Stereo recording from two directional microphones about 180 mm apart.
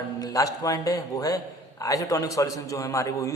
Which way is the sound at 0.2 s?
20° left (ahead or behind).